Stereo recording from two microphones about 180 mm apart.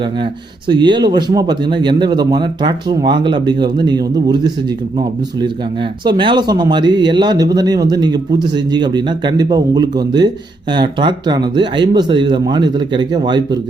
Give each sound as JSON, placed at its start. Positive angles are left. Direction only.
{"t": 0.7, "sound": "speech", "side_deg": -25}
{"t": 6.1, "sound": "speech", "side_deg": -25}